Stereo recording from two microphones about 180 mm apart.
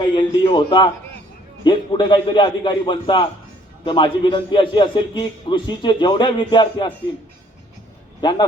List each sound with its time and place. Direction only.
0.1 s a sound: 25° left (ahead or behind)
1.6 s a man's voice: 25° left (ahead or behind)
8.2 s a man's voice: 25° left (ahead or behind)